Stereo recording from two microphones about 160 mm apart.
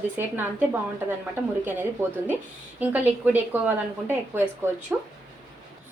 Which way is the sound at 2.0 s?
15° right (ahead or behind).